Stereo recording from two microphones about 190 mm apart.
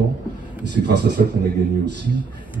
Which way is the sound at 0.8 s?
65° right (ahead or behind).